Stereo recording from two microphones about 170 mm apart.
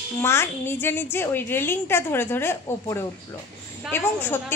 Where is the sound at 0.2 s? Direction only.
15° left (ahead or behind).